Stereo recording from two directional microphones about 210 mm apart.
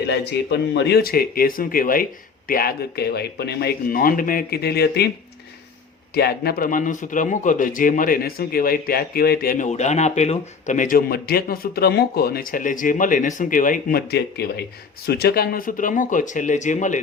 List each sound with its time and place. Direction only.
0.1 s speech: 55° left (ahead or behind)
6.1 s a man's voice: 50° left (ahead or behind)